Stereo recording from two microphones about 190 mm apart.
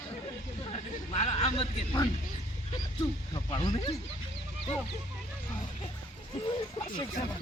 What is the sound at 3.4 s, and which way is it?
Speech, 25° left (ahead or behind).